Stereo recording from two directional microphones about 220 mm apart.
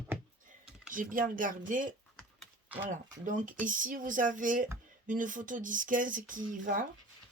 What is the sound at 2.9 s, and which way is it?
Speech, 35° right (ahead or behind).